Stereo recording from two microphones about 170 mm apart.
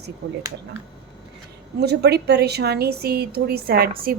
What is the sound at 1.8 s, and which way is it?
A woman's voice, 75° right (ahead or behind).